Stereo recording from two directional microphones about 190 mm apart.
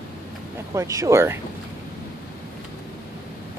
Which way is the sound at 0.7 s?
15° right (ahead or behind).